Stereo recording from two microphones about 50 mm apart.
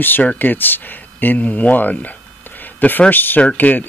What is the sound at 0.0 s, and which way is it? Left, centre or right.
Speech, left.